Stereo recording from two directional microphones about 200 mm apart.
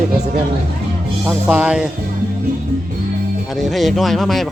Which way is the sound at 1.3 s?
5° right (ahead or behind).